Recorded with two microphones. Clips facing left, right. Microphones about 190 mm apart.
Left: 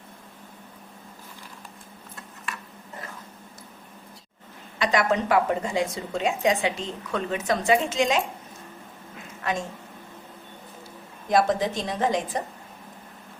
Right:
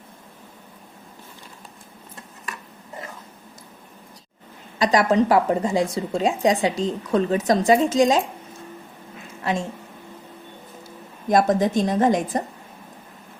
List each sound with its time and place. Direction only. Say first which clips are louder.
4.8 s speech: right 5 dB; 35° right (ahead or behind)
9.4 s a woman's voice: right 4 dB; 30° right (ahead or behind)
11.3 s a woman's voice: right 4 dB; 45° right (ahead or behind)